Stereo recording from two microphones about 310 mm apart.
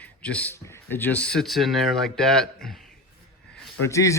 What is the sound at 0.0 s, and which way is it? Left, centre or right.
A man's voice, centre.